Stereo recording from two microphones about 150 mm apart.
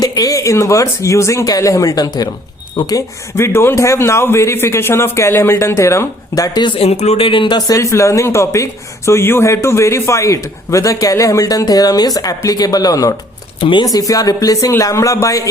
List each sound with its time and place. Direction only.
0.0 s speech: 25° left (ahead or behind)
7.7 s speech: 20° left (ahead or behind)
13.6 s speech: 35° left (ahead or behind)
14.1 s speech: 25° left (ahead or behind)